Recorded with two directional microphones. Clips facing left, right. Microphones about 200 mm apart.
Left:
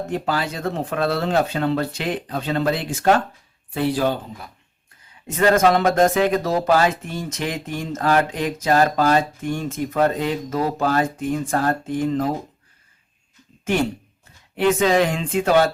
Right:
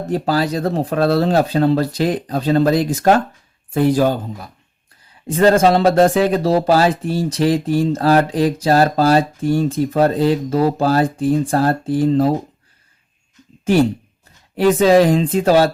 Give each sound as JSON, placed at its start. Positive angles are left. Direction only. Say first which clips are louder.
{"t": 0.1, "sound": "speech", "louder": "right 9 dB", "side_deg": -35}
{"t": 5.4, "sound": "speech", "louder": "right 4 dB", "side_deg": -30}
{"t": 14.5, "sound": "speech", "louder": "right 6 dB", "side_deg": -35}